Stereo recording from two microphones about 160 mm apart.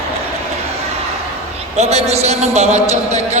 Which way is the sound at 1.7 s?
40° right (ahead or behind).